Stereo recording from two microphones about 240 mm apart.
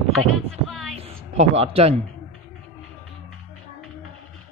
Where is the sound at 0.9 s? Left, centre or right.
Right.